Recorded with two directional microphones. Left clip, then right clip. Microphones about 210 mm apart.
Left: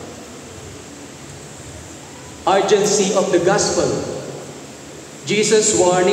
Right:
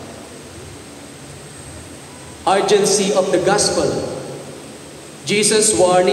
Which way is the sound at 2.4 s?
55° right (ahead or behind).